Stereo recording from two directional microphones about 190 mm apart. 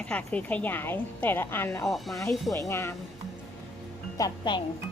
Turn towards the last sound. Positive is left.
turn(degrees=20)  # may be behind; listen again after turning